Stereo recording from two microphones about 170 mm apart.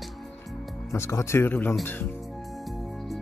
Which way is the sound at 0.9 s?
15° left (ahead or behind).